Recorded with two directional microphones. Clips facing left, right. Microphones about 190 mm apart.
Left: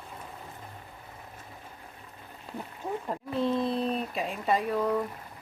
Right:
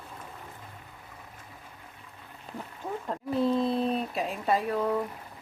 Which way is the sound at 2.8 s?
15° left (ahead or behind).